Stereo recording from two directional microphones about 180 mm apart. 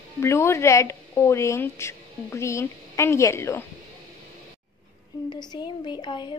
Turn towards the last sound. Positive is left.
turn(degrees=25)  # may be behind; listen again after turning